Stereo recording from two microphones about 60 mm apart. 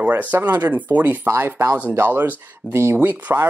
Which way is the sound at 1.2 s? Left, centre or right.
Right.